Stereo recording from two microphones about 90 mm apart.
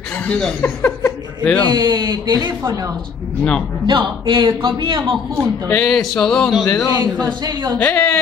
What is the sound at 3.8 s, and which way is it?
A man's voice, 60° right (ahead or behind).